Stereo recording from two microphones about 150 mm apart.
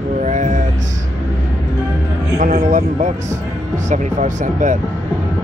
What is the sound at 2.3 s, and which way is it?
A man's voice, 50° right (ahead or behind).